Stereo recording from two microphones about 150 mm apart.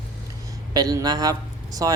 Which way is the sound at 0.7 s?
25° right (ahead or behind).